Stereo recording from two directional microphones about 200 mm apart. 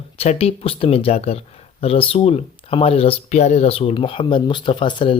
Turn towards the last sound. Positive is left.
turn(degrees=25)  # may be behind; listen again after turning